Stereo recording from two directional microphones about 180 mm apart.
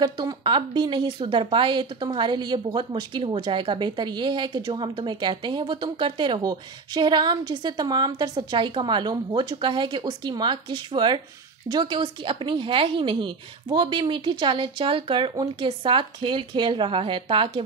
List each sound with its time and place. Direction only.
0.0 s a woman's voice: 20° right (ahead or behind)